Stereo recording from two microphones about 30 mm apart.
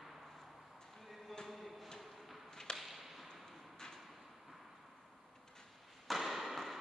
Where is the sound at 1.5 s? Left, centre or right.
Centre.